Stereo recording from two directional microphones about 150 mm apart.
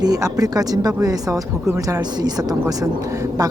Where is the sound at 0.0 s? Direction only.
25° right (ahead or behind).